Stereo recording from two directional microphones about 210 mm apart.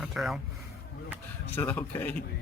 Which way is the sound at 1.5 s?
10° left (ahead or behind).